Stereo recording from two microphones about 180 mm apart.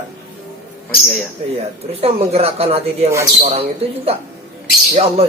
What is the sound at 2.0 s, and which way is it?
Speech, 35° right (ahead or behind).